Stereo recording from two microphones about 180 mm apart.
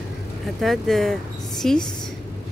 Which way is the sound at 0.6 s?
Centre (ahead or behind).